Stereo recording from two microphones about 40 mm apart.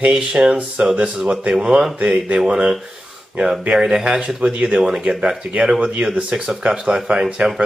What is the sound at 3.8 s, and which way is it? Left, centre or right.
Speech, centre.